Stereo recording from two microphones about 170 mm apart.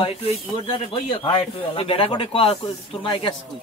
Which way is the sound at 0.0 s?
35° left (ahead or behind).